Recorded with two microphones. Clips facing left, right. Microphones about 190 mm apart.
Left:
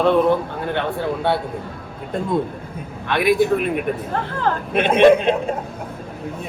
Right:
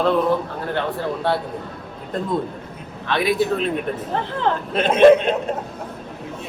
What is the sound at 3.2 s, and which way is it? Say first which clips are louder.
Speech: left 3 dB; 55° left (ahead or behind).